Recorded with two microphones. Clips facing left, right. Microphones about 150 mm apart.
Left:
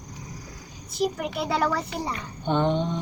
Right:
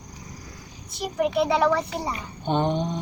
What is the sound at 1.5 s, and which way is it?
Speech, centre (ahead or behind).